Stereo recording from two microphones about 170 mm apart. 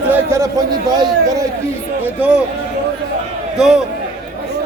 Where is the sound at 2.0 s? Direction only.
5° right (ahead or behind).